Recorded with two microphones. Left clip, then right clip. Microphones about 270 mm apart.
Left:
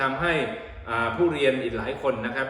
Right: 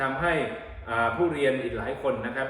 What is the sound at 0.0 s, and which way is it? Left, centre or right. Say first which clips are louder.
A man's voice: left 2 dB; centre.